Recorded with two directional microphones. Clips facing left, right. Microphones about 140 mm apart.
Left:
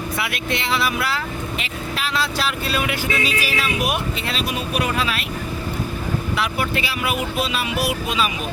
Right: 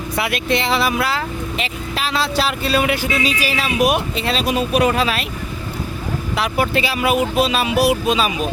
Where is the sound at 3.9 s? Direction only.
30° right (ahead or behind).